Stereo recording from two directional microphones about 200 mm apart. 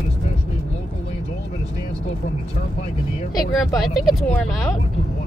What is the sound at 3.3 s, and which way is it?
Speech, centre (ahead or behind).